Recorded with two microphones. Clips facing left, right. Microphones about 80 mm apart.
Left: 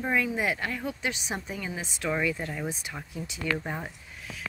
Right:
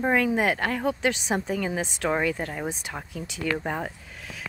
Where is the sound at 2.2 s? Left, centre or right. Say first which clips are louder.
Right 3 dB; right.